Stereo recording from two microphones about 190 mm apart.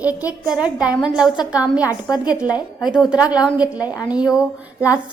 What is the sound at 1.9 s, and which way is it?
Speech, 20° left (ahead or behind).